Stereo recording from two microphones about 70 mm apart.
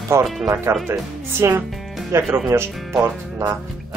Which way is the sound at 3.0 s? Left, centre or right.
Right.